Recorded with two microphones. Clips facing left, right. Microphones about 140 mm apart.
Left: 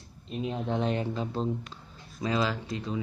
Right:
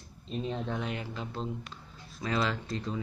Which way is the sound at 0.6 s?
30° left (ahead or behind).